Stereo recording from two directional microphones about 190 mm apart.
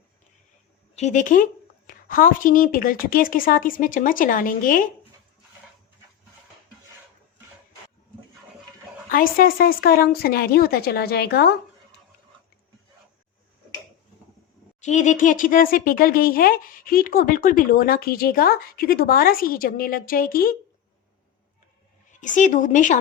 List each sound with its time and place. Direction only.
0.9 s speech: 40° left (ahead or behind)
9.0 s speech: 50° left (ahead or behind)
14.8 s speech: 40° left (ahead or behind)
22.2 s speech: 40° left (ahead or behind)